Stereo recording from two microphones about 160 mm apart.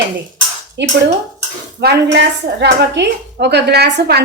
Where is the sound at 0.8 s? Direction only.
90° right.